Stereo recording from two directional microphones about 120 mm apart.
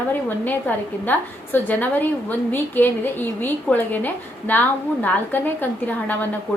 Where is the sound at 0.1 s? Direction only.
15° left (ahead or behind).